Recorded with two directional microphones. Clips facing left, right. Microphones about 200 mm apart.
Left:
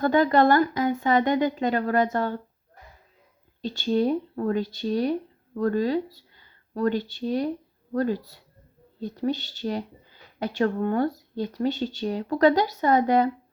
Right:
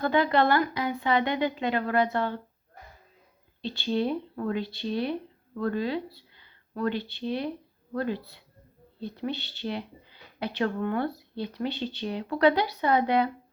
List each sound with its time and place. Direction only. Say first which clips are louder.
0.0 s speech: left 4 dB; 45° left (ahead or behind)
3.6 s speech: left 4 dB; 45° left (ahead or behind)